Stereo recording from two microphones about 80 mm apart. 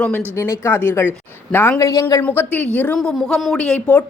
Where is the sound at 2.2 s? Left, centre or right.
Left.